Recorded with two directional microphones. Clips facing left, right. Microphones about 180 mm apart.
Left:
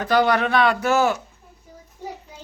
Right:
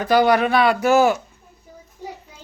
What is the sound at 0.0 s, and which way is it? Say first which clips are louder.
Speech: right 3 dB; 10° right (ahead or behind).